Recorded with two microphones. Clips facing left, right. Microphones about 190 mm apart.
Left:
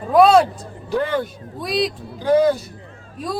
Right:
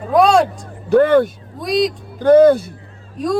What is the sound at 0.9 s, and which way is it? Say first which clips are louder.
Speech: right 10 dB; 50° right (ahead or behind).